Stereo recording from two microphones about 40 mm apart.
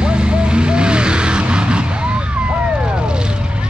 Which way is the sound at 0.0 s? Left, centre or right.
Right.